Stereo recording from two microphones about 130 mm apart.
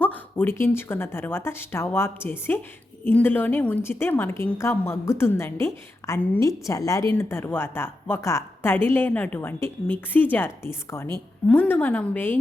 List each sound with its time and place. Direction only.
0.0 s a woman's voice: 10° left (ahead or behind)